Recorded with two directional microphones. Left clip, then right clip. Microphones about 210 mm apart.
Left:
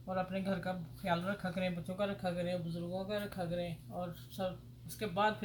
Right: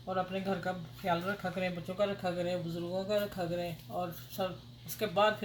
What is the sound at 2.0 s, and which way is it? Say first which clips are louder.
Speech: right 5 dB; 30° right (ahead or behind).